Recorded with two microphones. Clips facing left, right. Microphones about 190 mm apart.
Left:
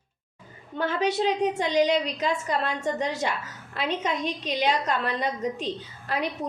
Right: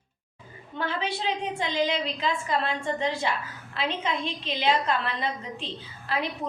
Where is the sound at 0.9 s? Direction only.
45° left (ahead or behind).